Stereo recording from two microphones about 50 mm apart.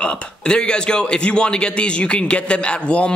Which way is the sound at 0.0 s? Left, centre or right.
Centre.